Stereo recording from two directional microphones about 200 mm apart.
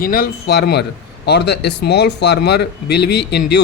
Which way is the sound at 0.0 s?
45° left (ahead or behind).